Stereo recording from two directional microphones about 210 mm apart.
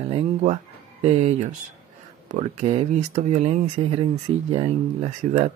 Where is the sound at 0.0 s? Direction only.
25° right (ahead or behind).